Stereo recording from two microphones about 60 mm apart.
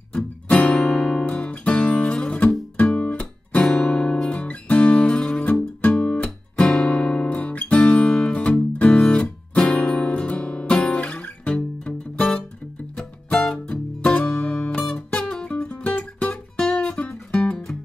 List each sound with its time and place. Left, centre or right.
0.1 s music: left
2.8 s guitar: left
12.9 s music: centre